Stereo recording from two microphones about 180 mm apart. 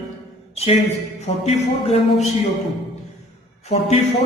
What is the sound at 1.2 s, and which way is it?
A man's voice, 35° left (ahead or behind).